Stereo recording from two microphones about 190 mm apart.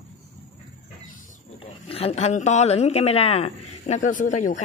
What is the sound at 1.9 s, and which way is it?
Speech, 35° left (ahead or behind).